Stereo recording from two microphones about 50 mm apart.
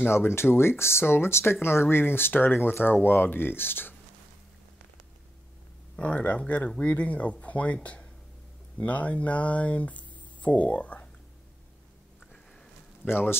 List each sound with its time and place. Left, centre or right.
0.1 s speech: left
5.9 s speech: left
13.0 s speech: left